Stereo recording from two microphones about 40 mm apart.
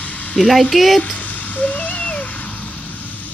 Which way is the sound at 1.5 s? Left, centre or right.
Left.